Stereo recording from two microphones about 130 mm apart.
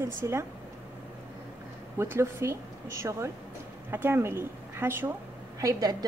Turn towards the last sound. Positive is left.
turn(degrees=-30)  # may be behind; listen again after turning